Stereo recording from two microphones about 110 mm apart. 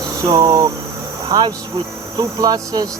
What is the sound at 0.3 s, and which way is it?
Speech, 35° right (ahead or behind).